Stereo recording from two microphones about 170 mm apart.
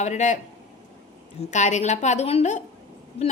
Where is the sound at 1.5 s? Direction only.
45° left (ahead or behind).